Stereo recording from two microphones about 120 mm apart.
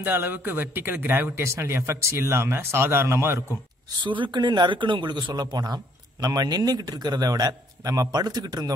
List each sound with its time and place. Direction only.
0.0 s speech: 15° right (ahead or behind)
4.0 s a man's voice: 40° right (ahead or behind)